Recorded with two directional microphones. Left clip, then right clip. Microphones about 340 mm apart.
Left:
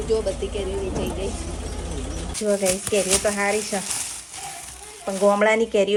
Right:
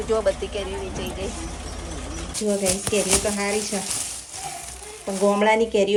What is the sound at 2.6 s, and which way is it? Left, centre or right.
Speech, centre.